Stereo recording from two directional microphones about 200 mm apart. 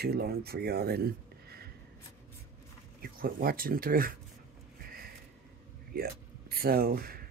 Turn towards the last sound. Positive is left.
turn(degrees=-50)  # may be behind; listen again after turning